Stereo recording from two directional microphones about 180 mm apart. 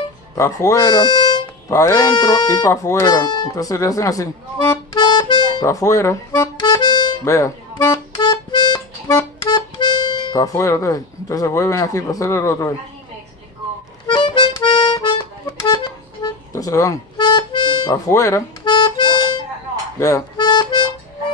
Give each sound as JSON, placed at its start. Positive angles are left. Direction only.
{"t": 0.4, "sound": "speech", "side_deg": 15}
{"t": 4.9, "sound": "music", "side_deg": 25}
{"t": 5.6, "sound": "speech", "side_deg": 20}
{"t": 8.2, "sound": "music", "side_deg": 25}
{"t": 14.0, "sound": "music", "side_deg": 25}
{"t": 20.0, "sound": "harmonica", "side_deg": 20}